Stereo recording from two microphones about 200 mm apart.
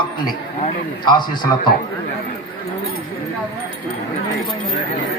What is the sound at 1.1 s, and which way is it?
Speech, 20° left (ahead or behind).